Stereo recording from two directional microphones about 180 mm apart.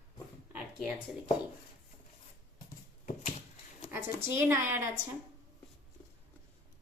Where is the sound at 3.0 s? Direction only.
45° left (ahead or behind).